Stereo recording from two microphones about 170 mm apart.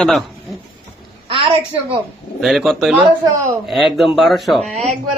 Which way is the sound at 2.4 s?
Centre (ahead or behind).